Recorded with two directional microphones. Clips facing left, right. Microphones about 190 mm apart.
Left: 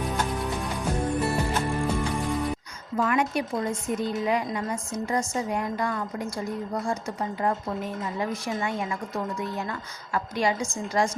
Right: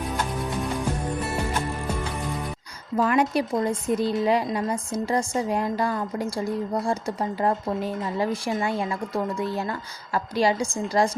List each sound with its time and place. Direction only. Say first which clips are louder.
3.0 s speech: right 3 dB; 35° right (ahead or behind)